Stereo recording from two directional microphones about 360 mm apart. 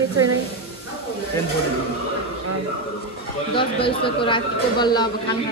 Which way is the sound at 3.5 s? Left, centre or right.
Centre.